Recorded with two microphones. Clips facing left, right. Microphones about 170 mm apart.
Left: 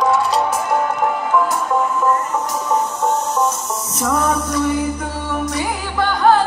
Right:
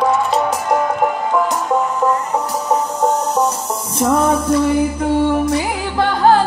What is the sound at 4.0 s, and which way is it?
Music, 30° right (ahead or behind).